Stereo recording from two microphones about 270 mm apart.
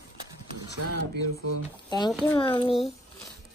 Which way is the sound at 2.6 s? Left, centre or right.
Centre.